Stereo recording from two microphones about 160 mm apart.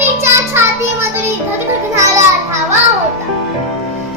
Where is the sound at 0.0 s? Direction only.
15° right (ahead or behind).